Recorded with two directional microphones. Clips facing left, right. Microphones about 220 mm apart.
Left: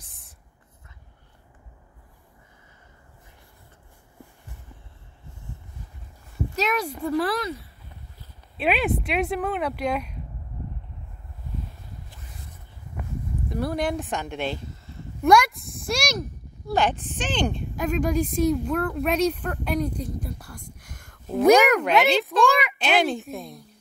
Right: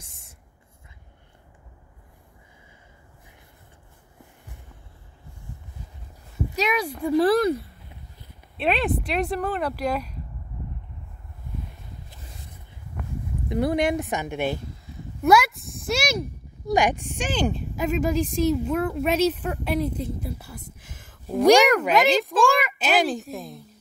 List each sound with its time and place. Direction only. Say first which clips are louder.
6.5 s a sound: right 1 dB; centre (ahead or behind)
7.2 s speech: right 8 dB; 50° right (ahead or behind)
8.5 s speech: even; centre (ahead or behind)
13.5 s a woman's voice: right 4 dB; 20° right (ahead or behind)
14.9 s a sound: even; 5° right (ahead or behind)
16.6 s speech: right 2 dB; 15° right (ahead or behind)